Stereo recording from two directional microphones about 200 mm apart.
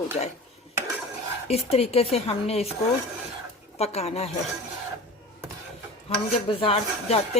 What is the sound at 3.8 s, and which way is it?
Speech, 30° left (ahead or behind).